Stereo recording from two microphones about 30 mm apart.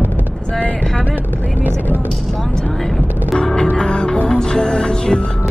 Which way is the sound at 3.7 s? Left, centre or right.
Left.